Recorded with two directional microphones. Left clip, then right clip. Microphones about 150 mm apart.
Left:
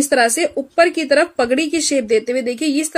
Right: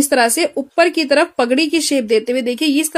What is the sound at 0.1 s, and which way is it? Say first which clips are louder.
Speech: even; 45° right (ahead or behind).